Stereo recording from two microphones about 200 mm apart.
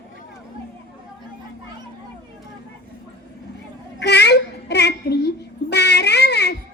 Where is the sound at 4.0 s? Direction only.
55° left (ahead or behind).